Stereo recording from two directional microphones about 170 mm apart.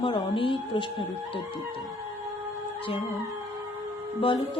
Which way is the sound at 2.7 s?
30° left (ahead or behind).